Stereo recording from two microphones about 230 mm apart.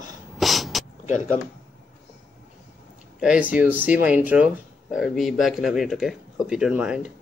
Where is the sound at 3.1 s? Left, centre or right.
Centre.